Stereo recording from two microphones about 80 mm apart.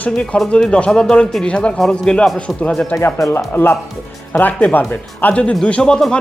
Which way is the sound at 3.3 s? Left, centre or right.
Left.